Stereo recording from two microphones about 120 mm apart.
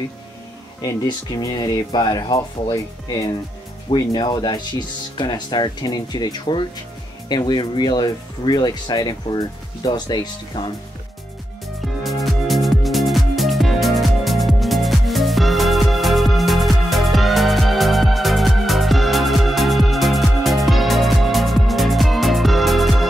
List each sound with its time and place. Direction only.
1.0 s speech: 35° left (ahead or behind)
12.0 s music: centre (ahead or behind)